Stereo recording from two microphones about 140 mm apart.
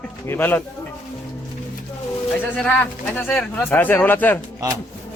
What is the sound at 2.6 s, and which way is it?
Speech, 10° left (ahead or behind).